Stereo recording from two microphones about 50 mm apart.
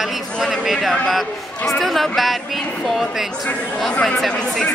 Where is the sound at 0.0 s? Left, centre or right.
Centre.